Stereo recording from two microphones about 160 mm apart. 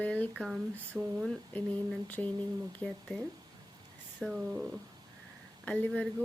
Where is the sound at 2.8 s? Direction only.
5° left (ahead or behind).